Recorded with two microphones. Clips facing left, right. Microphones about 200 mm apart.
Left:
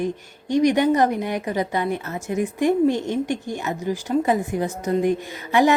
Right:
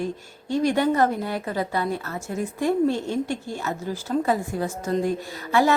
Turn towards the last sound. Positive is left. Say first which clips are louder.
# left 3 dB
turn(degrees=20)  # may be behind; listen again after turning